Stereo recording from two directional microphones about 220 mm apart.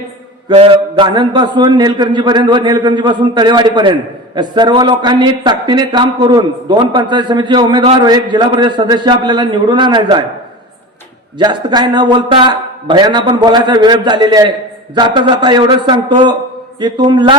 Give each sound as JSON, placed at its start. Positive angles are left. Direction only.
{"t": 0.4, "sound": "speech", "side_deg": -25}
{"t": 11.3, "sound": "speech", "side_deg": -20}